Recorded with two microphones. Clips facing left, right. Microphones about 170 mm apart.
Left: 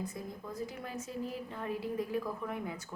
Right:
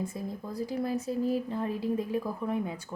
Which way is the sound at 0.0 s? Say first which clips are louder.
Right 5 dB; 30° right (ahead or behind).